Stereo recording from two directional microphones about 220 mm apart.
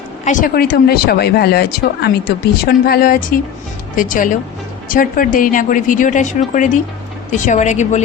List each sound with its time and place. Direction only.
0.3 s speech: 40° left (ahead or behind)